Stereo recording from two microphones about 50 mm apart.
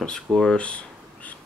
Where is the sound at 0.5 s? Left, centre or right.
Left.